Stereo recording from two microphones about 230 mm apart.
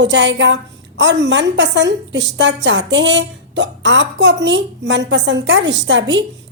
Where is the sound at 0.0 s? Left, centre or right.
Right.